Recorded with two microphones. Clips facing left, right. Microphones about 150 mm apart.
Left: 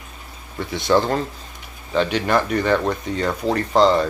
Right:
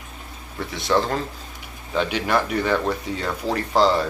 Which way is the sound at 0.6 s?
Centre (ahead or behind).